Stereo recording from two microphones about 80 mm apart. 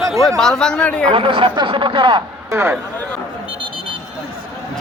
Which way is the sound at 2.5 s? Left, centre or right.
Right.